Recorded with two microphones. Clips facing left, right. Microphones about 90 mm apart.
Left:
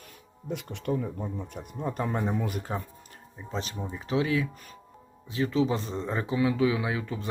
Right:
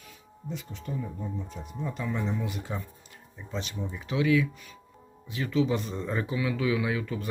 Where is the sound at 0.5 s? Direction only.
65° left (ahead or behind).